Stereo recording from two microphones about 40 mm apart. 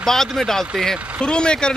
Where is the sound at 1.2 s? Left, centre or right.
Left.